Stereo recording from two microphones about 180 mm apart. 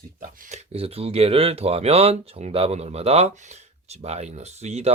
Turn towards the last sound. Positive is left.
turn(degrees=-40)  # may be behind; listen again after turning